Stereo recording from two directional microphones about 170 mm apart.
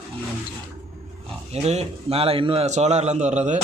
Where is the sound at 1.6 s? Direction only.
35° right (ahead or behind).